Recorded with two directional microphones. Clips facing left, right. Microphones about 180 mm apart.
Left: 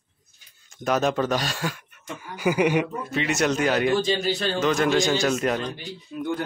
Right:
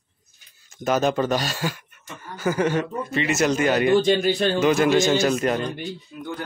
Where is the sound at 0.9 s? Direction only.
Centre (ahead or behind).